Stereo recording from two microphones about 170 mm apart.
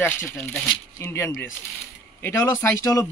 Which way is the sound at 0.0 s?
10° left (ahead or behind).